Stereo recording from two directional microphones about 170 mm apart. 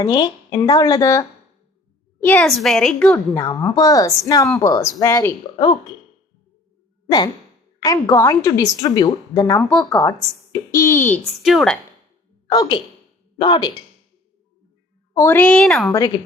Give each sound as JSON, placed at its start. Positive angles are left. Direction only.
{"t": 0.0, "sound": "a woman's voice", "side_deg": 25}
{"t": 2.2, "sound": "a woman's voice", "side_deg": 5}
{"t": 3.3, "sound": "a woman's voice", "side_deg": 20}
{"t": 7.8, "sound": "a woman's voice", "side_deg": 20}
{"t": 9.6, "sound": "a woman's voice", "side_deg": 5}
{"t": 11.3, "sound": "a woman's voice", "side_deg": 0}
{"t": 12.5, "sound": "a woman's voice", "side_deg": 25}
{"t": 15.1, "sound": "a woman's voice", "side_deg": 15}
{"t": 15.9, "sound": "a woman's voice", "side_deg": 20}